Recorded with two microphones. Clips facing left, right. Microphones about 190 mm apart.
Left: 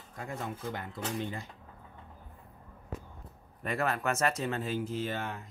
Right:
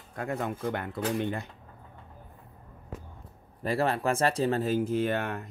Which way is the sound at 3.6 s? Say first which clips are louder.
Right 4 dB; 30° right (ahead or behind).